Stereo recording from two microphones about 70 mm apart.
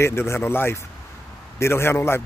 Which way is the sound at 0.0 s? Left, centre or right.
Left.